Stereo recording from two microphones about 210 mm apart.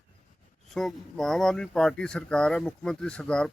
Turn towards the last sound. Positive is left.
turn(degrees=5)  # may be behind; listen again after turning